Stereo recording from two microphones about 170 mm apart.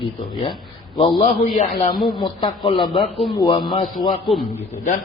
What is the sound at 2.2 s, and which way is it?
Speech, 25° left (ahead or behind).